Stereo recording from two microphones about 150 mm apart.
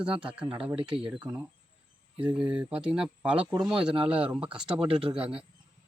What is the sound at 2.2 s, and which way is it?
Speech, 10° right (ahead or behind).